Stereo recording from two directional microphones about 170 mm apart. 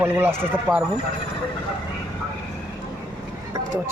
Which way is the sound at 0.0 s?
10° right (ahead or behind).